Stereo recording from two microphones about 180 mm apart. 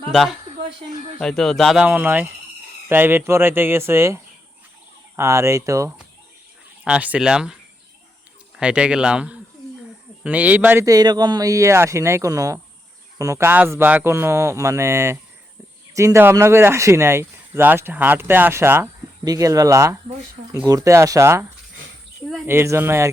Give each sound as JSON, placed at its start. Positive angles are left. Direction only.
{"t": 0.1, "sound": "speech", "side_deg": 0}
{"t": 22.4, "sound": "speech", "side_deg": -15}